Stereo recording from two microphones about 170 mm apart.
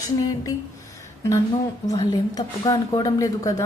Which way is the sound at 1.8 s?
20° left (ahead or behind).